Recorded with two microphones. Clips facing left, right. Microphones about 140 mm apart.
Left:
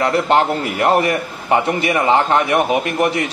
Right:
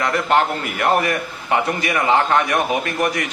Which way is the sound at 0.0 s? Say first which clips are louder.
Left 3 dB; 30° left (ahead or behind).